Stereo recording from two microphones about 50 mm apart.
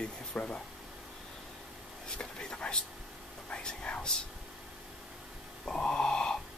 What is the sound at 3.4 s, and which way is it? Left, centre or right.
Whispering, centre.